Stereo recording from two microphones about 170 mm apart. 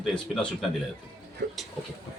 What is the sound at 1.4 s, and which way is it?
Speech, 90° right.